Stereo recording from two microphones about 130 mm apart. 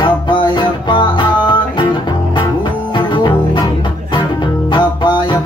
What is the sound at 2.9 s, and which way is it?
Music, 40° left (ahead or behind).